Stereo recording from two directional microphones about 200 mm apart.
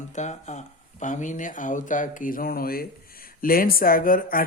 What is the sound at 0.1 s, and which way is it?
Speech, 35° left (ahead or behind).